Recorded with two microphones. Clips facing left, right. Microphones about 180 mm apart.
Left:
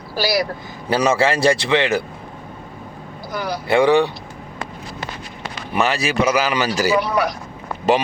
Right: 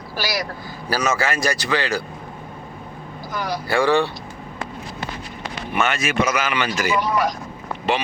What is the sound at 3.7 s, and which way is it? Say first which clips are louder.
Speech: left 4 dB; 20° left (ahead or behind).